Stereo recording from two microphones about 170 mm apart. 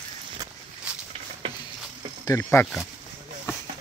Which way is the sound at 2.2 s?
15° left (ahead or behind).